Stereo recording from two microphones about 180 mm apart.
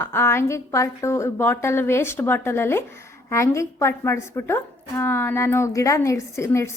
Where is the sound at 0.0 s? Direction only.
15° left (ahead or behind).